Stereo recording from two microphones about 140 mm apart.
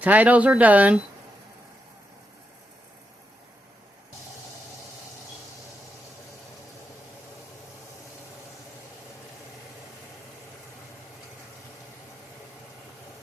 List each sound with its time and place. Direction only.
0.0 s speech: 10° right (ahead or behind)